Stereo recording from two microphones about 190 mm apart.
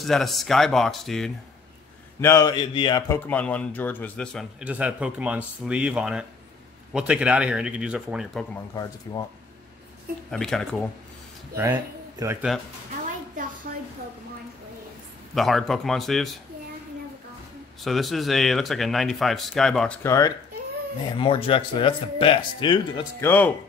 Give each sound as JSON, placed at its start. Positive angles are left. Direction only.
{"t": 0.0, "sound": "a man's voice", "side_deg": 0}
{"t": 2.1, "sound": "speech", "side_deg": 15}
{"t": 3.1, "sound": "a man's voice", "side_deg": 5}
{"t": 10.3, "sound": "a man's voice", "side_deg": 5}
{"t": 11.5, "sound": "speech", "side_deg": -15}
{"t": 13.7, "sound": "a sound", "side_deg": -50}
{"t": 15.3, "sound": "a man's voice", "side_deg": 0}
{"t": 17.8, "sound": "a man's voice", "side_deg": 0}
{"t": 21.2, "sound": "speech", "side_deg": 30}
{"t": 23.2, "sound": "speech", "side_deg": 10}